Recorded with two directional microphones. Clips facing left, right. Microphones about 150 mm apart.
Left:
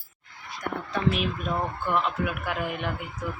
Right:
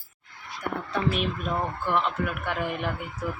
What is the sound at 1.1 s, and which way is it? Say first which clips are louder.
Speech: even; centre (ahead or behind).